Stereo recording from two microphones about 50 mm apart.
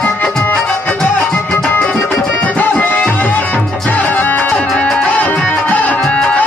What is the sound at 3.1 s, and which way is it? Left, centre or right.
Music, left.